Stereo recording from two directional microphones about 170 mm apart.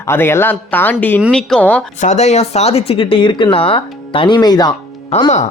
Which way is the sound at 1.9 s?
45° left (ahead or behind).